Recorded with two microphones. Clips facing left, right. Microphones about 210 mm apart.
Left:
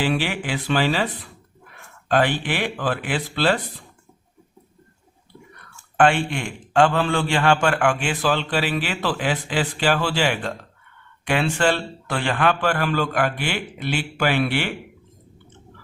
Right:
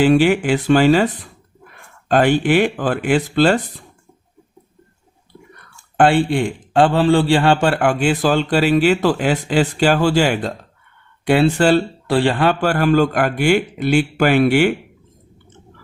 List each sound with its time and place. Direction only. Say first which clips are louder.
0.2 s a man's voice: right 11 dB; 50° right (ahead or behind)
6.0 s a man's voice: right 5 dB; 35° right (ahead or behind)